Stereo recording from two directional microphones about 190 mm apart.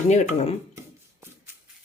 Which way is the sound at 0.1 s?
35° left (ahead or behind).